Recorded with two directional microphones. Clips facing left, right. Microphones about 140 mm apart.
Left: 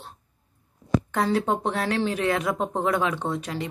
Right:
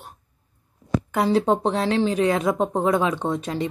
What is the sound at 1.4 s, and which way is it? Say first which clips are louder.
Speech: right 4 dB; 30° right (ahead or behind).